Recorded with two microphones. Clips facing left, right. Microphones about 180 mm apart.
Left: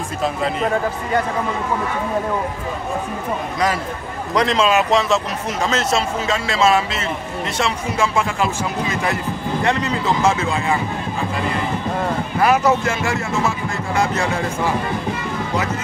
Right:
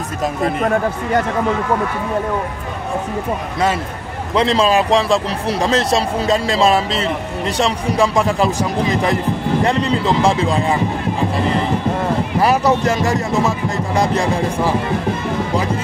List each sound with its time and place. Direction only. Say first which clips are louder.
4.4 s speech: right 2 dB; 30° right (ahead or behind)
12.4 s speech: right 1 dB; 35° right (ahead or behind)